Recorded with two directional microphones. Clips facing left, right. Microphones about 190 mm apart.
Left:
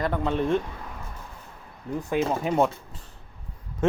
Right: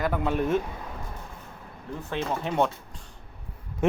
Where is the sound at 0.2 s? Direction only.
10° right (ahead or behind).